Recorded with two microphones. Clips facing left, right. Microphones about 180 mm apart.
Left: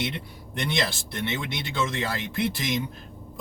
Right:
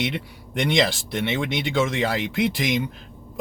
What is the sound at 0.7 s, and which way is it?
Speech, 90° right.